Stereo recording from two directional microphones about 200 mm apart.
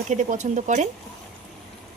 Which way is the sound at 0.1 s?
35° right (ahead or behind).